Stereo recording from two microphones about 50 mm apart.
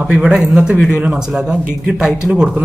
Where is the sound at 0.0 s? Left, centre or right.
Centre.